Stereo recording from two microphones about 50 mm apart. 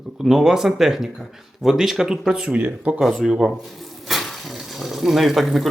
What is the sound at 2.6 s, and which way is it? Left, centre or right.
Speech, right.